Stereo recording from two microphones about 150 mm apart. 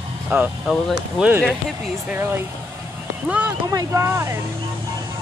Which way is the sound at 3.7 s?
20° right (ahead or behind).